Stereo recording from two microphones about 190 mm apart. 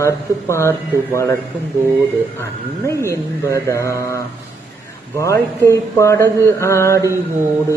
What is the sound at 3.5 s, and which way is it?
Speech, 15° left (ahead or behind).